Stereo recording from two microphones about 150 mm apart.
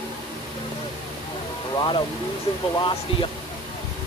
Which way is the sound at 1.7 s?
30° left (ahead or behind).